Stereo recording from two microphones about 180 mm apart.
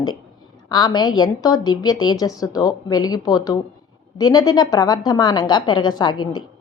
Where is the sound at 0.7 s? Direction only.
25° left (ahead or behind).